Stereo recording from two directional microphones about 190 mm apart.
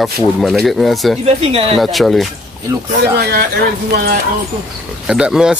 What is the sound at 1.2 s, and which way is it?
Speech, 30° right (ahead or behind).